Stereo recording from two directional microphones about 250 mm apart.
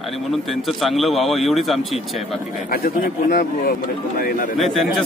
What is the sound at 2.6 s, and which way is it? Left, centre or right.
Speech, left.